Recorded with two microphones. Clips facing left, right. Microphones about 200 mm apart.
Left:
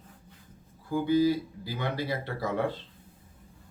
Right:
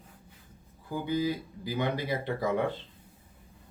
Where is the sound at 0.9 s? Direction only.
15° right (ahead or behind).